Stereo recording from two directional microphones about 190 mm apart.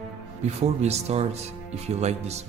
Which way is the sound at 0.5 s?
35° right (ahead or behind).